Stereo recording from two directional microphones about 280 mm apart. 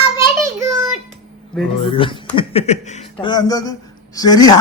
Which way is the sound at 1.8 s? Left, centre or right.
Centre.